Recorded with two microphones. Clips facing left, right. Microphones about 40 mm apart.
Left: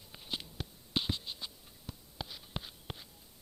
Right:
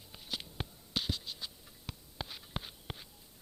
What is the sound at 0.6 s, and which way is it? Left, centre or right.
Scratch, right.